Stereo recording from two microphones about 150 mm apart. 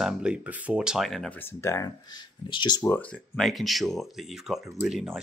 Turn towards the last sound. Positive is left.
turn(degrees=0)  # may be behind; listen again after turning